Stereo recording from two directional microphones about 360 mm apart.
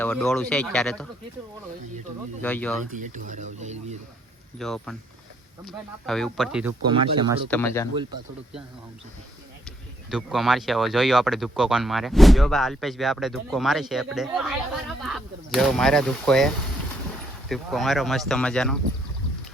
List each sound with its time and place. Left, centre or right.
0.0 s speech: centre
2.4 s speech: centre
2.9 s speech: right
4.5 s speech: centre
6.9 s speech: centre
7.5 s speech: centre
9.6 s speech: centre
17.5 s speech: centre